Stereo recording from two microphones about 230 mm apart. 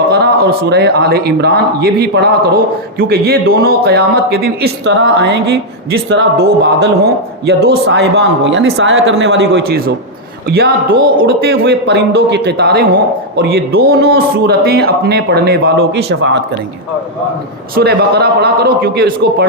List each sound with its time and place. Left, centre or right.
0.1 s a man's voice: right
11.2 s a man's voice: right
17.7 s a man's voice: right